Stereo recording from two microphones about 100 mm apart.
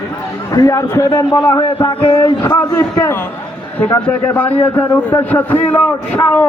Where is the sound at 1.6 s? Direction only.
55° left (ahead or behind).